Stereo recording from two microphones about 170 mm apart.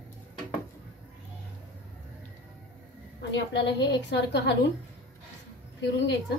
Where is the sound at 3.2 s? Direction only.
90° left.